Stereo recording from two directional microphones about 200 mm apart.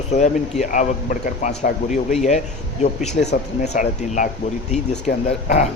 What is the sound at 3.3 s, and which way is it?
Speech, 40° left (ahead or behind).